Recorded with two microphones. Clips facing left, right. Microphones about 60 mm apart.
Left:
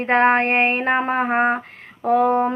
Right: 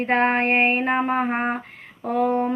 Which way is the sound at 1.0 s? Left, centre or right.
Left.